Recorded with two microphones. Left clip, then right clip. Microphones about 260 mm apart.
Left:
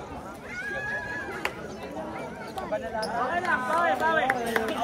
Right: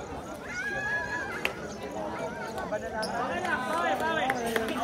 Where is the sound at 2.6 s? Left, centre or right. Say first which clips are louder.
Left 4 dB; left.